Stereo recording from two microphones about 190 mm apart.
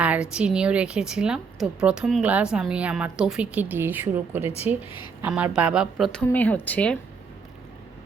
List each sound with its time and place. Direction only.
0.0 s a woman's voice: 5° right (ahead or behind)